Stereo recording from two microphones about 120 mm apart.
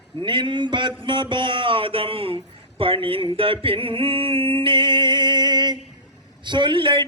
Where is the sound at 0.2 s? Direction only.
40° right (ahead or behind).